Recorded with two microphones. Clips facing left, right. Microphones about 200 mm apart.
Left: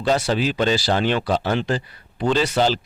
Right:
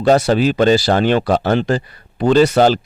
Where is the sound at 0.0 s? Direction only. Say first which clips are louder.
Right 7 dB; 45° right (ahead or behind).